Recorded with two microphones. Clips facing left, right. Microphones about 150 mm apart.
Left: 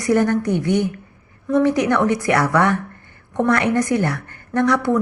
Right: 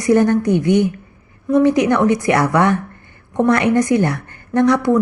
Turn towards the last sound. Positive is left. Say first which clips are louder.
# right 4 dB
turn(degrees=-20)  # may be behind; listen again after turning